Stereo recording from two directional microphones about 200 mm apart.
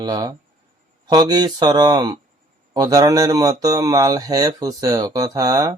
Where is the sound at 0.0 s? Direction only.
20° right (ahead or behind).